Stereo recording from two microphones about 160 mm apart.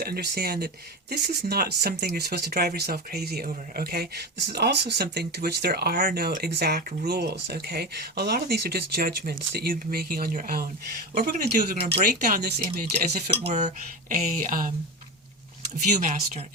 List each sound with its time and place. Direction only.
0.0 s speech: 75° right (ahead or behind)
11.8 s speech: 35° right (ahead or behind)
12.0 s speech: 65° right (ahead or behind); by 12.9 s 85° right
13.5 s speech: 45° right (ahead or behind)
14.3 s speech: 60° right (ahead or behind)
16.0 s speech: 50° right (ahead or behind)